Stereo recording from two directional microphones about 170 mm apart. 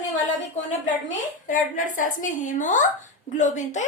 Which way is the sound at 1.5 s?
50° left (ahead or behind).